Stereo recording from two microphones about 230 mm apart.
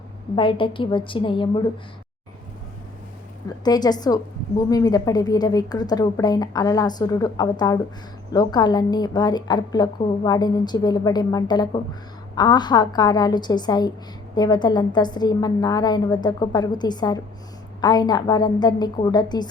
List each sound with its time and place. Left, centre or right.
0.3 s a woman's voice: left
3.6 s a woman's voice: centre